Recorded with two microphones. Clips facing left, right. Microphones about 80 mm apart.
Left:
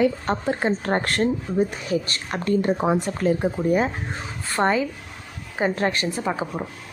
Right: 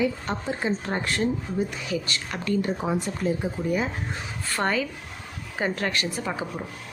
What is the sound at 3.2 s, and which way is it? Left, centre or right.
Speech, left.